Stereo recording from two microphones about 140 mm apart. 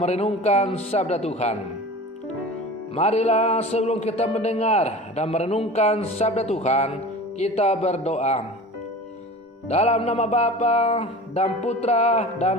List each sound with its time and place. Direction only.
0.0 s music: 50° left (ahead or behind)
2.9 s music: 50° left (ahead or behind)
9.6 s music: 50° left (ahead or behind)